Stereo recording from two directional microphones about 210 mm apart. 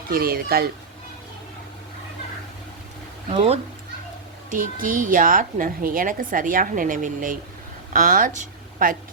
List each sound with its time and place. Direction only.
0.1 s speech: 45° right (ahead or behind)
3.3 s speech: 30° right (ahead or behind)
4.5 s a woman's voice: 40° right (ahead or behind)